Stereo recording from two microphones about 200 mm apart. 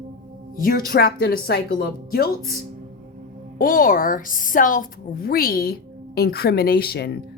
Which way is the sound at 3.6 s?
45° left (ahead or behind).